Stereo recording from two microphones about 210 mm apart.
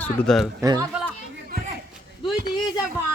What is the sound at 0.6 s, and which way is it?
Speech, 15° right (ahead or behind).